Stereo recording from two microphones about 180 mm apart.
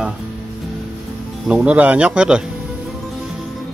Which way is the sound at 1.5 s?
5° right (ahead or behind).